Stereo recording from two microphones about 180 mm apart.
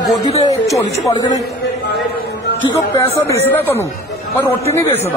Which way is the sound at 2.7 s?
15° left (ahead or behind).